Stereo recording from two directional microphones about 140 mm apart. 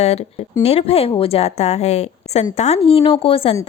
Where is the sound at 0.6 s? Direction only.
45° left (ahead or behind).